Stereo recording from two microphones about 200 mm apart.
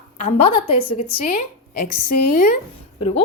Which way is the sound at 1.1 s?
45° left (ahead or behind).